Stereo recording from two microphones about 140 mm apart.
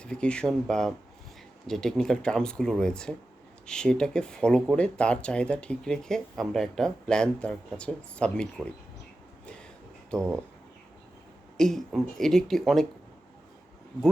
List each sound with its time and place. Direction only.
0.0 s speech: 5° left (ahead or behind)
11.5 s speech: 5° left (ahead or behind)